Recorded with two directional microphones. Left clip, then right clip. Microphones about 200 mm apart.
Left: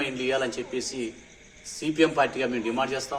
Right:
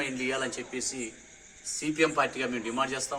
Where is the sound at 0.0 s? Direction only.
Centre (ahead or behind).